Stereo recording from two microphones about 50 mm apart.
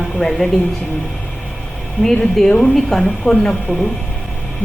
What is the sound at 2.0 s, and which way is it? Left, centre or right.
A woman's voice, centre.